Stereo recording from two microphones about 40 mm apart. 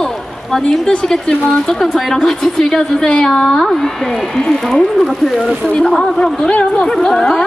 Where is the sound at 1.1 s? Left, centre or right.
Centre.